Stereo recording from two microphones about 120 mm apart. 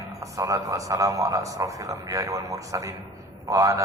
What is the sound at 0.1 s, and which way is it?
A man's voice, 30° right (ahead or behind).